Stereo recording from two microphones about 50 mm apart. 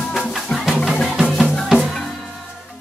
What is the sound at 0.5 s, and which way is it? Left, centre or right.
Music, left.